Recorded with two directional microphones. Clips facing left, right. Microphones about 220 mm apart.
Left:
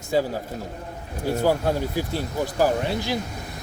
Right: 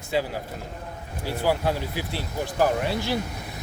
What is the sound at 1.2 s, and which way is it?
Speech, 45° left (ahead or behind).